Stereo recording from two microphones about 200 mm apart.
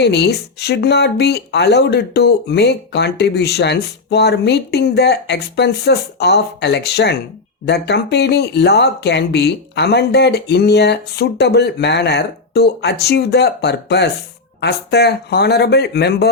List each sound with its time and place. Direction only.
0.0 s speech: 55° left (ahead or behind)